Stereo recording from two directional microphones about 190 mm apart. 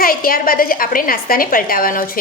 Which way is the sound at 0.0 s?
50° left (ahead or behind).